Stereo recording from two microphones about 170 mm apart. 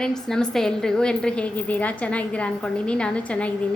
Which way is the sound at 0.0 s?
5° left (ahead or behind).